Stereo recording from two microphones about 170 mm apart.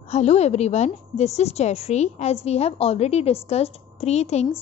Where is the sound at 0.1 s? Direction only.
40° left (ahead or behind).